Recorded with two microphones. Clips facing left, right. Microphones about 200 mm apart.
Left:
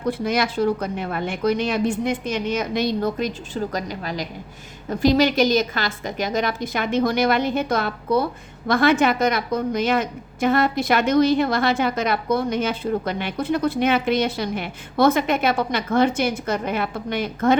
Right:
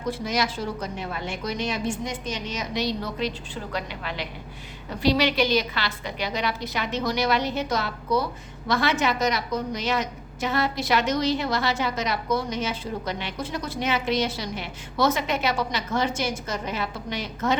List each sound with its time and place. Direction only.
0.0 s a woman's voice: 55° left (ahead or behind)